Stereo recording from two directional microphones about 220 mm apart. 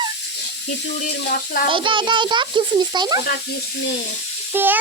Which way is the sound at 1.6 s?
20° right (ahead or behind).